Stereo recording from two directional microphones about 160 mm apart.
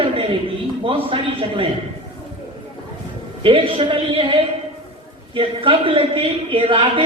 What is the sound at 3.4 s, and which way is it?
A man's voice, 35° right (ahead or behind).